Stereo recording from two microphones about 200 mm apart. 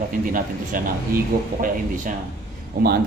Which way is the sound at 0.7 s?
45° right (ahead or behind).